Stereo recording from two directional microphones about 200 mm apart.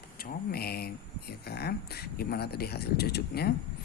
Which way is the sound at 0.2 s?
50° left (ahead or behind).